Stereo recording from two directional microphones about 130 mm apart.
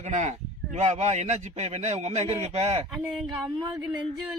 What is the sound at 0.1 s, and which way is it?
A man's voice, 65° right (ahead or behind).